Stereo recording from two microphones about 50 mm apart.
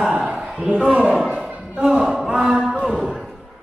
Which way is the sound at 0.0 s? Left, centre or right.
Centre.